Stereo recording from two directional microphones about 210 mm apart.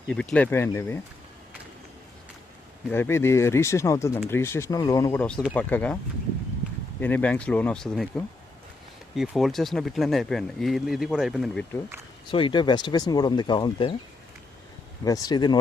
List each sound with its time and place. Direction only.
0.1 s speech: 5° left (ahead or behind)
2.9 s speech: 10° left (ahead or behind)
5.2 s speech: 5° left (ahead or behind)
7.0 s speech: 5° left (ahead or behind)
12.3 s speech: 25° left (ahead or behind)
15.0 s speech: 15° left (ahead or behind)